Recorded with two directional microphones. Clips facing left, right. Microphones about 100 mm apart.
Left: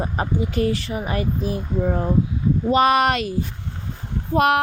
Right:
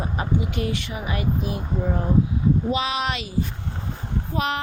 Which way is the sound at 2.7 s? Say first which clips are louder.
Left 8 dB; 55° left (ahead or behind).